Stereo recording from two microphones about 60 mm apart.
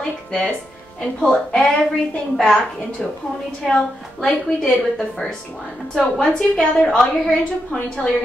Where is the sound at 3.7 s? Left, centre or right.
Centre.